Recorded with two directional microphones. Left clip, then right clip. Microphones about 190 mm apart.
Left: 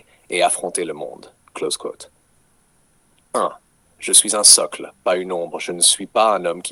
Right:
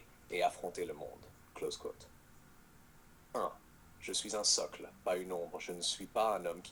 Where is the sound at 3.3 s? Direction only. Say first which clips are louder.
Left 18 dB; 45° left (ahead or behind).